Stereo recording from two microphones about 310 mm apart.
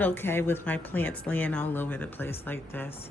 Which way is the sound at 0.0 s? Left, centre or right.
Centre.